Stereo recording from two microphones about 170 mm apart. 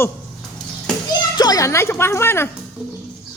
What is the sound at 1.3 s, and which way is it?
Speech, 20° left (ahead or behind).